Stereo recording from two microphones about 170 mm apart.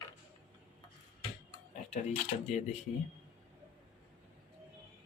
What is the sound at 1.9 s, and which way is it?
Speech, 40° left (ahead or behind).